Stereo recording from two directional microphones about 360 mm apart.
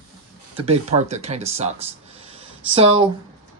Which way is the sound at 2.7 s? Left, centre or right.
Centre.